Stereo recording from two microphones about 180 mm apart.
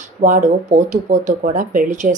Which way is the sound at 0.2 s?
45° right (ahead or behind).